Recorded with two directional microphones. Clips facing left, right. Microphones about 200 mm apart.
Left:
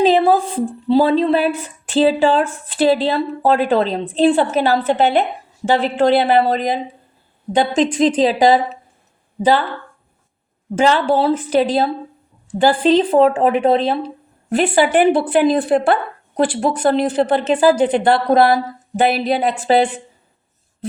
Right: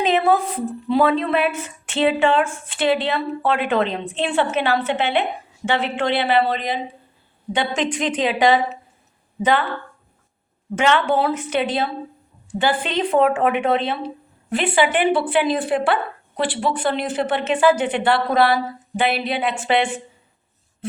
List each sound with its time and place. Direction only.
0.0 s speech: 30° left (ahead or behind)
10.8 s speech: 30° left (ahead or behind)